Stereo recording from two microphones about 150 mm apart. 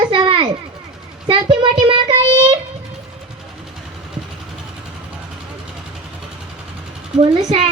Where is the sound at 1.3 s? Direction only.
35° right (ahead or behind).